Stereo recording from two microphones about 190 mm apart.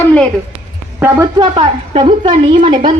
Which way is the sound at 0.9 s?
15° right (ahead or behind).